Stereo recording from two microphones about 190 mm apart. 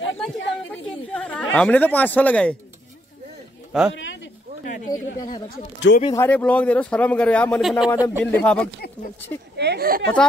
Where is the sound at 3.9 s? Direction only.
75° left (ahead or behind).